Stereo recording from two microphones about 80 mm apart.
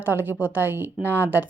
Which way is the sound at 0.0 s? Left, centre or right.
Right.